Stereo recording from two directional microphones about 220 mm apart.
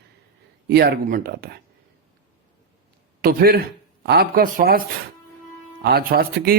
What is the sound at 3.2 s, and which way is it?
A man's voice, 40° right (ahead or behind).